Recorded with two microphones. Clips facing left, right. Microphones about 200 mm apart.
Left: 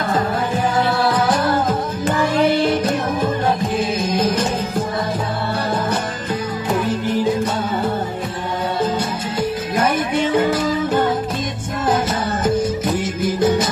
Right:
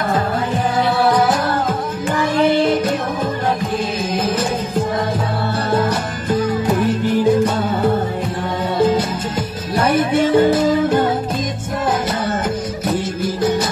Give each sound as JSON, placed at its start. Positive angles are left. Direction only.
{"t": 10.3, "sound": "music", "side_deg": -35}